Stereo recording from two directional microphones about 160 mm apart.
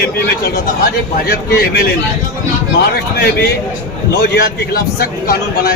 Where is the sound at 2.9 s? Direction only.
85° left.